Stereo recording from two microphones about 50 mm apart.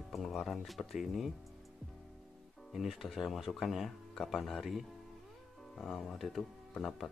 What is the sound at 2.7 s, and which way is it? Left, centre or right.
Speech, centre.